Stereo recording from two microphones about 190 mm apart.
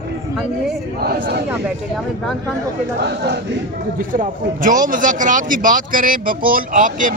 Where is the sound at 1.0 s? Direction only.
50° right (ahead or behind).